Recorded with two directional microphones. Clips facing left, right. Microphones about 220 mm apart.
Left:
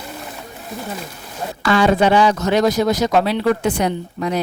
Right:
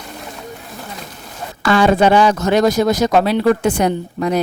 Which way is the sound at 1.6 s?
50° right (ahead or behind).